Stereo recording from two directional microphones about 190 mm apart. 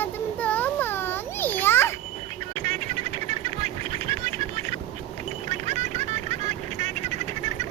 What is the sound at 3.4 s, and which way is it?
Duck, 35° right (ahead or behind).